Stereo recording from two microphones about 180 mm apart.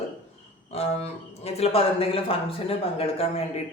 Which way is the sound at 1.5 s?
35° left (ahead or behind).